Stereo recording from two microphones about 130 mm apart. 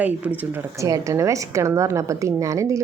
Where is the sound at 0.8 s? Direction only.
25° right (ahead or behind).